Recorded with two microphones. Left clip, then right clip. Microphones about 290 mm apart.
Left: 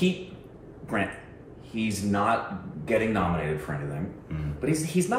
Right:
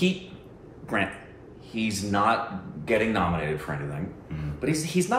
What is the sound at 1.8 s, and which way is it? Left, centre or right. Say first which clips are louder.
Speech: right 2 dB; centre.